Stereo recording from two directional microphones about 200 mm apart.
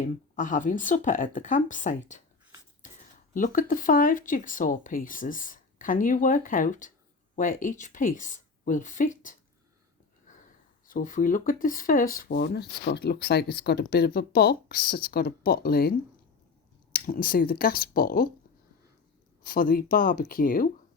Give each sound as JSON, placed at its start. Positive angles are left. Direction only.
{"t": 0.3, "sound": "speech", "side_deg": 40}
{"t": 3.3, "sound": "speech", "side_deg": 40}
{"t": 10.3, "sound": "sniff", "side_deg": 40}
{"t": 10.8, "sound": "speech", "side_deg": 40}
{"t": 19.4, "sound": "speech", "side_deg": 45}